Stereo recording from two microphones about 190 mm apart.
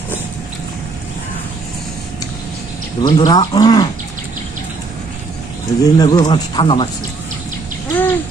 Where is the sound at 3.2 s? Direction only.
20° left (ahead or behind).